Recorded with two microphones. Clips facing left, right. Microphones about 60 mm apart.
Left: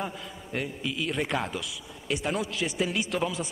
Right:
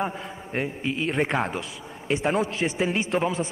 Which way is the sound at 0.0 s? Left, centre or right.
Right.